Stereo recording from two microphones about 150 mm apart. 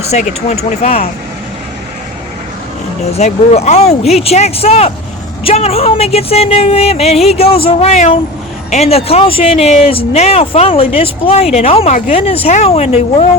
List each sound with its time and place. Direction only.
0.0 s speech: 50° left (ahead or behind)
3.0 s speech: 45° left (ahead or behind)